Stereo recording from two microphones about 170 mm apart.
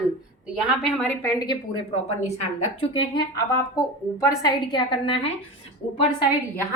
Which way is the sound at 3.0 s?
25° left (ahead or behind).